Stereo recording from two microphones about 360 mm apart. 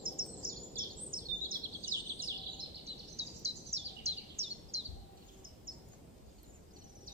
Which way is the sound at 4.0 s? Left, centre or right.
Centre.